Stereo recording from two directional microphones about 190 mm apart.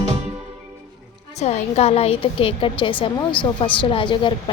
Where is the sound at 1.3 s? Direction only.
35° left (ahead or behind).